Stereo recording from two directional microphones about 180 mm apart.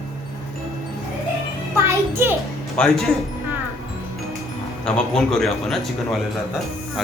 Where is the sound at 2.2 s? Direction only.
10° right (ahead or behind).